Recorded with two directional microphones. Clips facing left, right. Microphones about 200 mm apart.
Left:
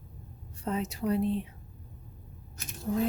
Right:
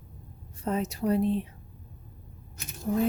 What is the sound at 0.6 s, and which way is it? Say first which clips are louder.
Speech: right 3 dB; 45° right (ahead or behind).